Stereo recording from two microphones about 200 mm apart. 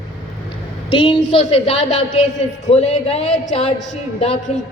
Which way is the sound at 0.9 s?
25° left (ahead or behind).